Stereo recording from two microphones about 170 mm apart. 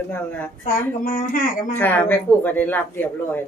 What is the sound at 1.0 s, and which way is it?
Speech, 55° left (ahead or behind).